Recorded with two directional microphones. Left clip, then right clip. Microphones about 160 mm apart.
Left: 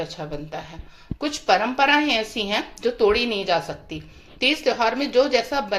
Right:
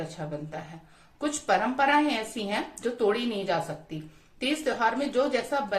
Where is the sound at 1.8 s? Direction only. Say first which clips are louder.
Left 5 dB; 20° left (ahead or behind).